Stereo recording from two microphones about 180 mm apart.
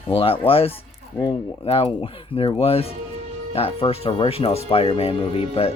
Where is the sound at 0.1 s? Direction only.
30° left (ahead or behind).